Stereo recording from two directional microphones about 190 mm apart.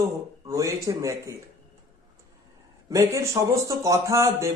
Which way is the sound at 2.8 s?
15° right (ahead or behind).